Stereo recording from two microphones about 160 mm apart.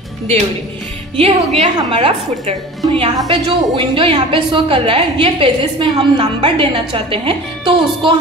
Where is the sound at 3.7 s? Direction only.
35° right (ahead or behind).